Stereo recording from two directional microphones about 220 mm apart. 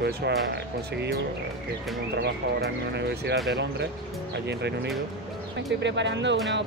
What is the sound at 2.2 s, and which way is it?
Speech, 50° right (ahead or behind).